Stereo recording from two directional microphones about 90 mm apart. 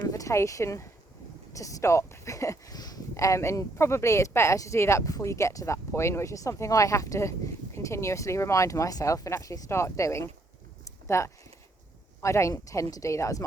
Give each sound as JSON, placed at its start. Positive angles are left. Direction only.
{"t": 0.1, "sound": "speech", "side_deg": 35}